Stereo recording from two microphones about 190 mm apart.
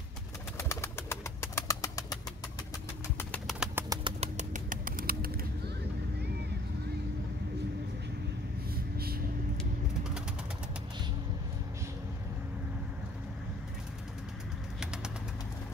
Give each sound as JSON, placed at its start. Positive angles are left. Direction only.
{"t": 0.6, "sound": "bird", "side_deg": 15}
{"t": 3.2, "sound": "bird", "side_deg": 10}
{"t": 3.5, "sound": "bird", "side_deg": -5}
{"t": 3.9, "sound": "bird", "side_deg": -25}
{"t": 4.4, "sound": "bird", "side_deg": -45}
{"t": 8.7, "sound": "vehicle", "side_deg": -55}
{"t": 9.6, "sound": "vehicle", "side_deg": -5}